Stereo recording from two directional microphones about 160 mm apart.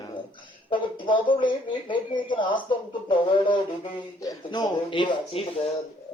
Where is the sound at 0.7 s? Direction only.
30° left (ahead or behind).